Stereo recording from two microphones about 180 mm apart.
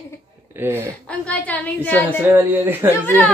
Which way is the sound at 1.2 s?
10° left (ahead or behind).